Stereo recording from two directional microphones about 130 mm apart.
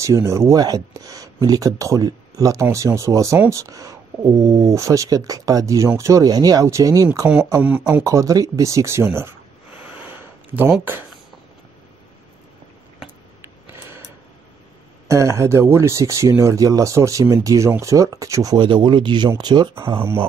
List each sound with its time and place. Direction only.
0.0 s speech: 20° right (ahead or behind)
10.0 s a sound: 15° right (ahead or behind)
15.0 s speech: 25° right (ahead or behind)
18.6 s speech: 40° right (ahead or behind)
20.0 s speech: 15° right (ahead or behind)